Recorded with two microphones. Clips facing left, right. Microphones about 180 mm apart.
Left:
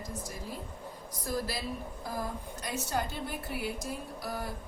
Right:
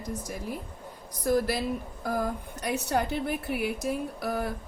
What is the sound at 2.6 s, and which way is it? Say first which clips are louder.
Speech: right 6 dB; 60° right (ahead or behind).